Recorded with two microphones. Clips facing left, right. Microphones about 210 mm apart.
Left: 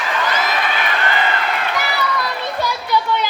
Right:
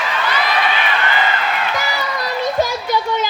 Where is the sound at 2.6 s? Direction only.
45° right (ahead or behind).